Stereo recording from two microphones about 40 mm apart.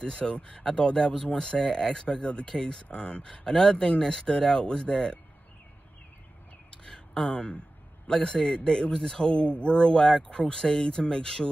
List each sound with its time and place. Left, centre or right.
0.0 s speech: left
6.7 s a sound: left
7.3 s speech: left
8.1 s speech: centre